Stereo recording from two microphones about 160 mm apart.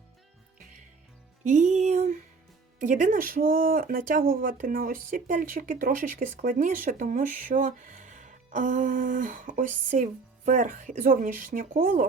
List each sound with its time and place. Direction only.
1.5 s music: 45° right (ahead or behind)
2.8 s speech: 50° right (ahead or behind)